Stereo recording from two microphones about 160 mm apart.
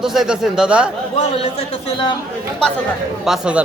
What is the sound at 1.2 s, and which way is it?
Speech, 35° left (ahead or behind).